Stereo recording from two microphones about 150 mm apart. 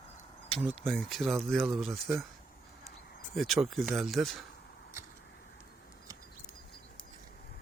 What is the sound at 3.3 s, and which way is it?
Speech, centre (ahead or behind).